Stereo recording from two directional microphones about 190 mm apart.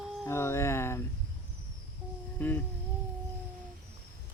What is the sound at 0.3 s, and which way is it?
Speech, 15° left (ahead or behind).